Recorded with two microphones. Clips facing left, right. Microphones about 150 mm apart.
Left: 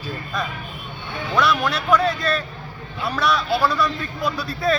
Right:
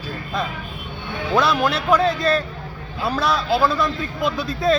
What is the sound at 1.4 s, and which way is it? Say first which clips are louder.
A man's voice: right 1 dB; 30° right (ahead or behind).